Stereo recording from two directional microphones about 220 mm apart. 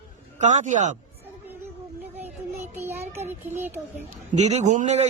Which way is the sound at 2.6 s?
10° right (ahead or behind).